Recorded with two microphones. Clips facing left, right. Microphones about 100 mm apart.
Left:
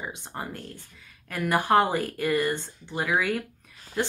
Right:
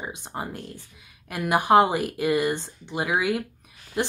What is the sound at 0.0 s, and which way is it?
Speech, 20° right (ahead or behind).